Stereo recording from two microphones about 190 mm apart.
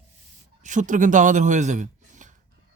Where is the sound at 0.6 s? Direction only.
40° right (ahead or behind).